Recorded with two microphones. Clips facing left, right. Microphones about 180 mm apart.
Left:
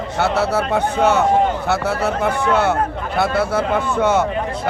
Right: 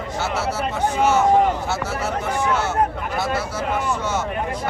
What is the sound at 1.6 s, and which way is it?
A man's voice, 60° left (ahead or behind).